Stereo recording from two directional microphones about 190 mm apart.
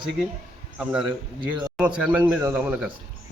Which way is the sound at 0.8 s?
5° right (ahead or behind).